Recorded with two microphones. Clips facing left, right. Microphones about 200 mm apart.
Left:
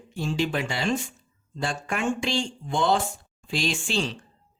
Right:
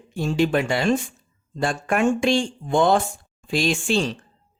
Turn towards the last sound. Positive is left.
turn(degrees=-50)  # may be behind; listen again after turning